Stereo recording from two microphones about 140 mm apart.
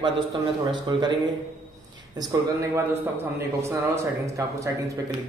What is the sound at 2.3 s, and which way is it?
Speech, 25° right (ahead or behind).